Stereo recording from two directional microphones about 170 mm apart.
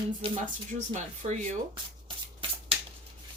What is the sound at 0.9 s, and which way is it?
Speech, 45° right (ahead or behind).